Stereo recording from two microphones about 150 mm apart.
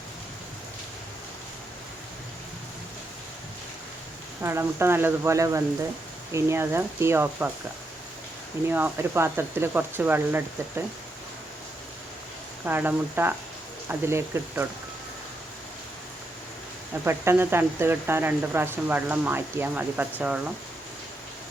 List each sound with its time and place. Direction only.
4.4 s speech: 15° right (ahead or behind)
8.7 s speech: 15° right (ahead or behind)
12.6 s speech: 10° right (ahead or behind)
16.9 s speech: 15° right (ahead or behind)